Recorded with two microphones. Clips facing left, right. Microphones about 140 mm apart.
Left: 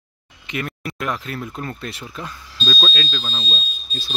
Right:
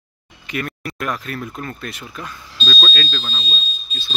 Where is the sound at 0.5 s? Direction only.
20° left (ahead or behind).